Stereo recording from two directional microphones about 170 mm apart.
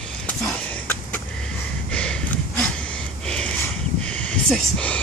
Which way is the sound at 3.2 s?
5° left (ahead or behind).